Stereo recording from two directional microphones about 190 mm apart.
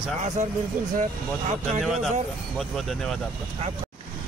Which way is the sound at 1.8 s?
Centre (ahead or behind).